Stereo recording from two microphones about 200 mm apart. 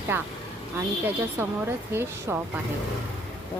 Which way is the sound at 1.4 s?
10° right (ahead or behind).